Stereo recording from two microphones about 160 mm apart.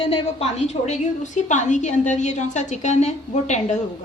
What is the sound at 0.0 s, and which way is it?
A woman's voice, 40° left (ahead or behind).